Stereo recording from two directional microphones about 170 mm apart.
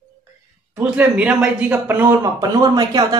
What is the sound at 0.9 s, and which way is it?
Speech, 5° right (ahead or behind).